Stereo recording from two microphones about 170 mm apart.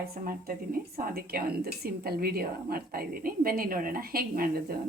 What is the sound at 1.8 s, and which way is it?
A woman's voice, 65° right (ahead or behind).